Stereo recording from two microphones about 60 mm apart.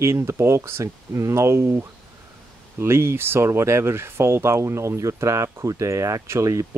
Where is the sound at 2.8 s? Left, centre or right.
Right.